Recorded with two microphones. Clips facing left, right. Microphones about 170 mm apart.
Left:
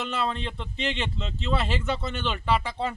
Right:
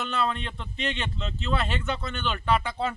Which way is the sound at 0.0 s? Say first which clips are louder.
Even; centre (ahead or behind).